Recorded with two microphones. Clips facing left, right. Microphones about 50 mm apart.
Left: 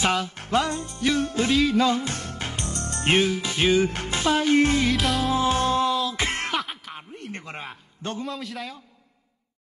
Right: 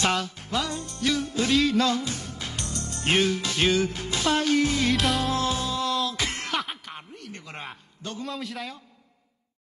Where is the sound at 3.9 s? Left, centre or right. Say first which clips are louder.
Left 2 dB; left.